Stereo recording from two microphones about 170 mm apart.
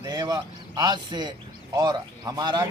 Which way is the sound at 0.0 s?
25° right (ahead or behind).